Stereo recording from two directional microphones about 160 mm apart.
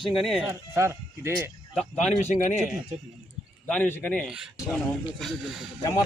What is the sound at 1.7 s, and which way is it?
Speech, centre (ahead or behind).